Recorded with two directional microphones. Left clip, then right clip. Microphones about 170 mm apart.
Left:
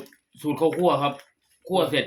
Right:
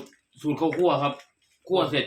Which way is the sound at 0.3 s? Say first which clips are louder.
Left 2 dB; 55° left (ahead or behind).